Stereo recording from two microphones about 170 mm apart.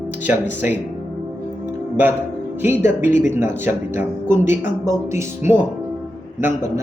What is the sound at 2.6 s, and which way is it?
Speech, 10° right (ahead or behind).